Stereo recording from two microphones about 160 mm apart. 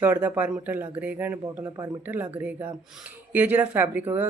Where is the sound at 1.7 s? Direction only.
25° right (ahead or behind).